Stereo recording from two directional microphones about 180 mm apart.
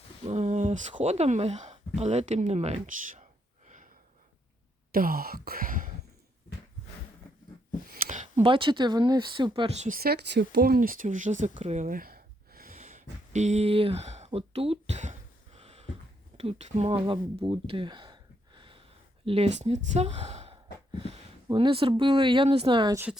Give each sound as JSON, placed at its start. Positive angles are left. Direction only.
{"t": 0.3, "sound": "speech", "side_deg": -40}
{"t": 4.9, "sound": "speech", "side_deg": -55}
{"t": 8.0, "sound": "speech", "side_deg": -40}
{"t": 10.0, "sound": "speech", "side_deg": -65}
{"t": 11.5, "sound": "a sound", "side_deg": -35}
{"t": 16.4, "sound": "speech", "side_deg": -35}